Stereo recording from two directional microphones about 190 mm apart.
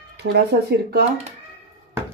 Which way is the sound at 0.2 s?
60° right (ahead or behind).